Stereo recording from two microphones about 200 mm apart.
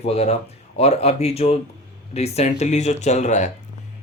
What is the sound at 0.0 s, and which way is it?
Speech, 30° left (ahead or behind).